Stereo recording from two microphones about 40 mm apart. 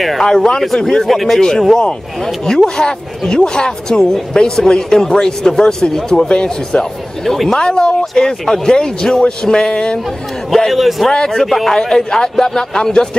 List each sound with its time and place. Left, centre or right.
0.2 s a man's voice: centre
2.4 s a man's voice: centre
6.2 s speech: left
7.2 s a man's voice: centre
7.5 s a man's voice: left
10.5 s a man's voice: centre
11.1 s a man's voice: centre
11.7 s a man's voice: centre